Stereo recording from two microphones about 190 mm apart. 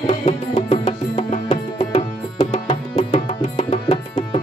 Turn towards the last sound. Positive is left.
turn(degrees=35)  # may be behind; listen again after turning